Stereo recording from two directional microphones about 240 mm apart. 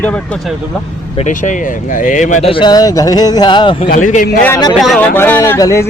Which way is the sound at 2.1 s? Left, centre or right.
Left.